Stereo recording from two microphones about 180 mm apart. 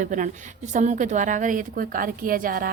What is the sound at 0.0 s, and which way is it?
A woman's voice, 45° right (ahead or behind).